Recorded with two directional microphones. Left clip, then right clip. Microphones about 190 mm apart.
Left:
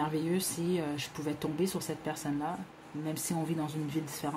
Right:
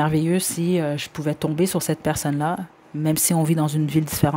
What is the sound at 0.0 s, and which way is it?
Speech, 50° right (ahead or behind).